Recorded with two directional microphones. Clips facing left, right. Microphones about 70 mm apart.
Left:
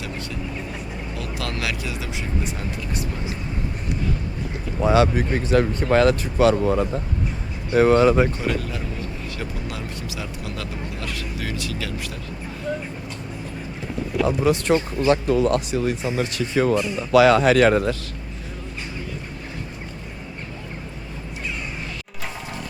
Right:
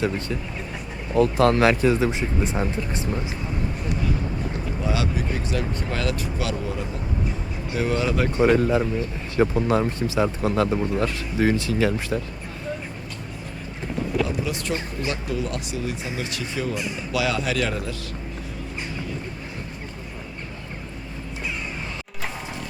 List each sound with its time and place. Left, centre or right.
1.1 s speech: right
4.8 s speech: left
8.4 s speech: right
14.3 s speech: left
15.7 s speech: left